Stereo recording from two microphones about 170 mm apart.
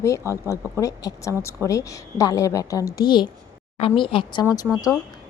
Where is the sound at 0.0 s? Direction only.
15° left (ahead or behind).